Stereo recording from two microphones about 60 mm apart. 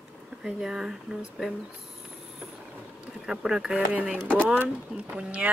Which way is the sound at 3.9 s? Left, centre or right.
Right.